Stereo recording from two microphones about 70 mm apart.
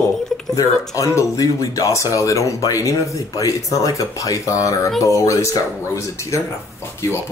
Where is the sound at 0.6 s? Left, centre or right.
Left.